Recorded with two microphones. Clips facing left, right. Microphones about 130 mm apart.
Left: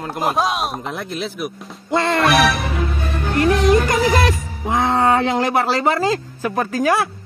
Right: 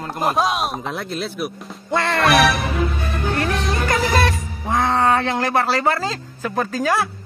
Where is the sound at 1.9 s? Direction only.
20° left (ahead or behind).